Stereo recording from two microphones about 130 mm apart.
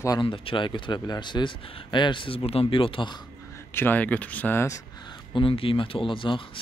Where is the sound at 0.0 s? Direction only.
35° left (ahead or behind).